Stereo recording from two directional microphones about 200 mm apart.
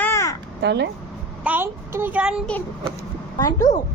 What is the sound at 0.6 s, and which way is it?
Speech, 55° right (ahead or behind).